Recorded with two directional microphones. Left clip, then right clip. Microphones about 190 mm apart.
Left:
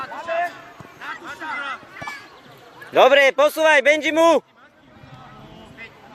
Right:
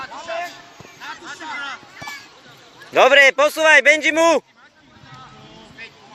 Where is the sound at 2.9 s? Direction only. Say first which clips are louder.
Right 2 dB; centre (ahead or behind).